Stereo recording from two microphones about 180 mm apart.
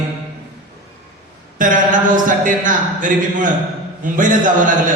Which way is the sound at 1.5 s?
45° right (ahead or behind).